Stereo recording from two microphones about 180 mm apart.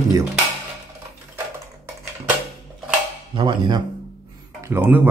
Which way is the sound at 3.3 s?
25° right (ahead or behind).